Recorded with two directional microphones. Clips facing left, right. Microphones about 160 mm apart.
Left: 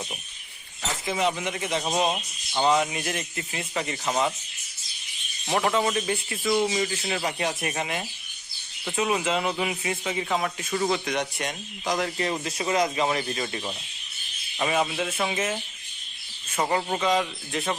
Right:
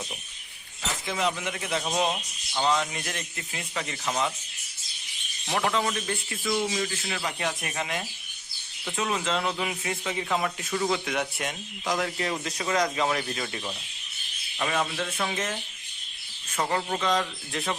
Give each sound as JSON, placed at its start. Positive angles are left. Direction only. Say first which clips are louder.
{"t": 0.8, "sound": "chink", "louder": "left 3 dB", "side_deg": 5}
{"t": 1.4, "sound": "a man's voice", "louder": "left 2 dB", "side_deg": 0}
{"t": 5.5, "sound": "a man's voice", "louder": "left 3 dB", "side_deg": 10}
{"t": 12.5, "sound": "speech", "louder": "left 2 dB", "side_deg": 20}
{"t": 12.8, "sound": "speech", "louder": "left 2 dB", "side_deg": 5}
{"t": 14.6, "sound": "speech", "louder": "left 3 dB", "side_deg": 10}
{"t": 16.6, "sound": "speech", "louder": "left 2 dB", "side_deg": 10}